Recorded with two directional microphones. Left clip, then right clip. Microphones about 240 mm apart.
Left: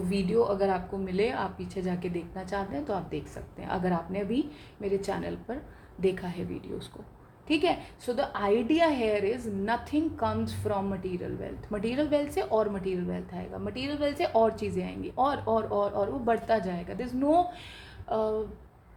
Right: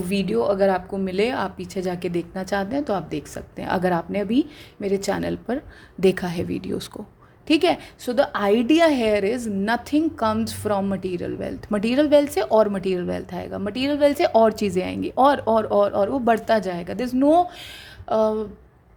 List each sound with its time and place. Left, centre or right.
0.1 s a woman's voice: right